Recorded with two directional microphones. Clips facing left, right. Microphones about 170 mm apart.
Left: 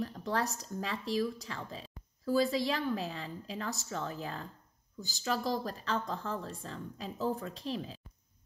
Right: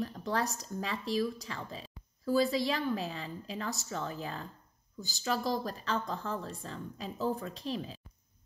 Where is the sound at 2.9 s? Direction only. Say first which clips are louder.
Right 1 dB; 20° right (ahead or behind).